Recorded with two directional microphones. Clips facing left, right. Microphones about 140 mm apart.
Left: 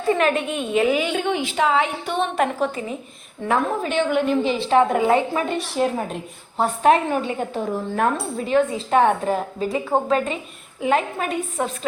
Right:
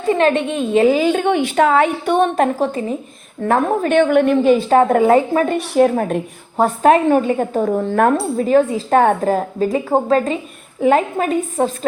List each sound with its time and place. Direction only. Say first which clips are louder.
0.1 s a woman's voice: right 5 dB; 30° right (ahead or behind)
1.2 s a woman's voice: right 6 dB; 55° right (ahead or behind)
3.4 s a woman's voice: right 5 dB; 50° right (ahead or behind)